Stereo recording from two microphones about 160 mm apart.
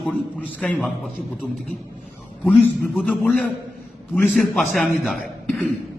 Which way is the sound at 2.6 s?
10° left (ahead or behind).